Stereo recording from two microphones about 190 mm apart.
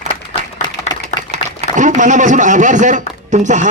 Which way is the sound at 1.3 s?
40° right (ahead or behind).